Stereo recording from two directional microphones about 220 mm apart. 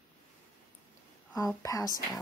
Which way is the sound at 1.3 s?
15° left (ahead or behind).